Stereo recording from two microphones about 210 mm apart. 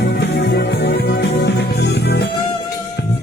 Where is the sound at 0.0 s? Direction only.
50° left (ahead or behind).